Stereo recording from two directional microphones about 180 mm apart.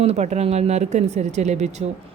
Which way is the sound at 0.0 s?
40° right (ahead or behind).